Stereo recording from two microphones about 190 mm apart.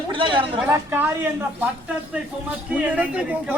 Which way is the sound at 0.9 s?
10° right (ahead or behind).